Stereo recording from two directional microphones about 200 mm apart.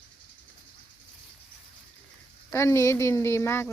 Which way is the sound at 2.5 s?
15° left (ahead or behind).